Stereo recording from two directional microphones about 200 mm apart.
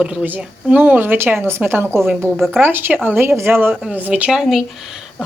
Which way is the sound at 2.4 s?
Centre (ahead or behind).